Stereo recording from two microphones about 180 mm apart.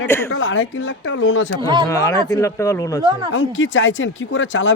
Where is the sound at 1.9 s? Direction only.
20° left (ahead or behind).